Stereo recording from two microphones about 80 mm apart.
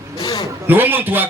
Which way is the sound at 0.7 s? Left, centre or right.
Right.